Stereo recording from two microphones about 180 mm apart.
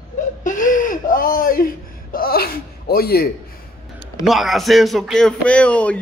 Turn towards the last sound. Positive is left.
turn(degrees=5)  # may be behind; listen again after turning